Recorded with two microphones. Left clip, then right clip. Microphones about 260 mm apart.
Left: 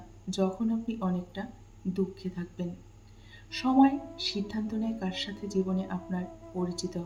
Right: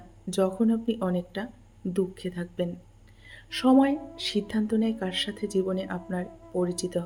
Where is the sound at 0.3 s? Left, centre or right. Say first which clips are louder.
Right 5 dB; right.